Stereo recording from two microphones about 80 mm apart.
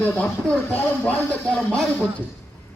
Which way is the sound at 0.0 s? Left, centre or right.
Centre.